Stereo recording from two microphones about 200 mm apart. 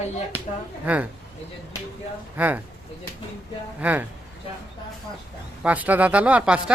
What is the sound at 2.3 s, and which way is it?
Speech, 10° right (ahead or behind).